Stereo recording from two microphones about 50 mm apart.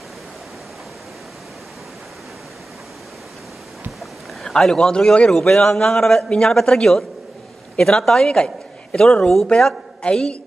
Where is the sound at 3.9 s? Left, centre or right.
Centre.